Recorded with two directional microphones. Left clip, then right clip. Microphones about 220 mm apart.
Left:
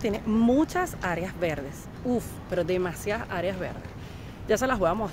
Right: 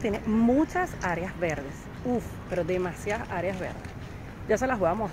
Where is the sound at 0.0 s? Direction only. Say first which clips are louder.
Left 1 dB; 15° left (ahead or behind).